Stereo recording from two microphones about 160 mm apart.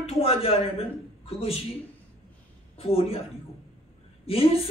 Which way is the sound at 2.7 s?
35° left (ahead or behind).